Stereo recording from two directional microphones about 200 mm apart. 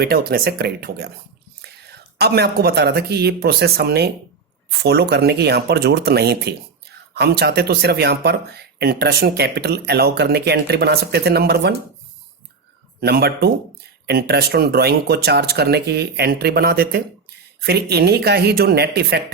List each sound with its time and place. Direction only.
0.0 s speech: 50° right (ahead or behind)
2.1 s speech: 55° right (ahead or behind)
13.0 s speech: 50° right (ahead or behind)